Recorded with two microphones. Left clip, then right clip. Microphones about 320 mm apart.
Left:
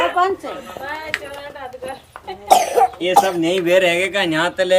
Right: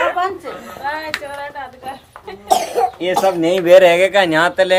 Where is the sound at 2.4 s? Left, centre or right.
Centre.